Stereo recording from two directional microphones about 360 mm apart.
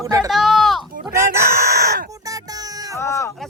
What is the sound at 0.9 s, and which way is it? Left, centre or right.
Chicken, centre.